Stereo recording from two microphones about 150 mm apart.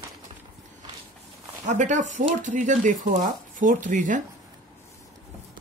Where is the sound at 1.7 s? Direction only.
55° right (ahead or behind).